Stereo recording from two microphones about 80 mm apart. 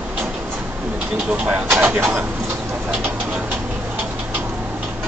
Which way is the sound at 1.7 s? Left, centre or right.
Centre.